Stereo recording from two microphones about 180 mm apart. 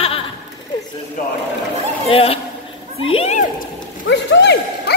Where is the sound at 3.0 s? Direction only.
35° left (ahead or behind).